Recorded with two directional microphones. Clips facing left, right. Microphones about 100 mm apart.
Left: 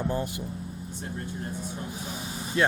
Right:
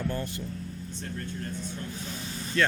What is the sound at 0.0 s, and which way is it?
Speech, 20° left (ahead or behind).